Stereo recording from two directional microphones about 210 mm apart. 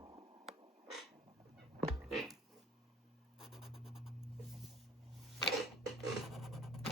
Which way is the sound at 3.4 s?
Centre (ahead or behind).